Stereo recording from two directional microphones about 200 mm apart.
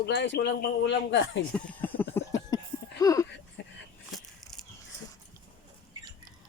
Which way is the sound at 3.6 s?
60° left (ahead or behind).